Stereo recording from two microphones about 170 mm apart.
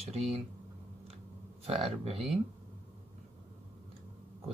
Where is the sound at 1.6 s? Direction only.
35° right (ahead or behind).